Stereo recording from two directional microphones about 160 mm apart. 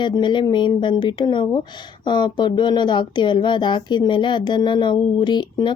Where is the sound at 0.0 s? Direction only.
30° left (ahead or behind).